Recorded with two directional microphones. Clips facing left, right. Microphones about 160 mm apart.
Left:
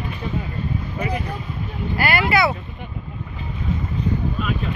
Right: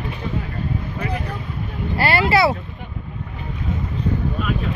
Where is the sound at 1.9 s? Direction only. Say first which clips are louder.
Right 2 dB; 30° right (ahead or behind).